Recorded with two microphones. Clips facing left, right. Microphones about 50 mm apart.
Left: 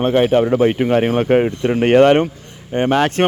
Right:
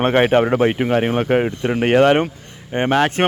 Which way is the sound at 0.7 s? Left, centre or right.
Centre.